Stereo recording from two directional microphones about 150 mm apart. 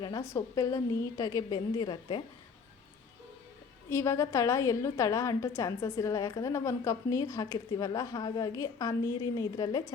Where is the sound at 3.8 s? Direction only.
20° left (ahead or behind).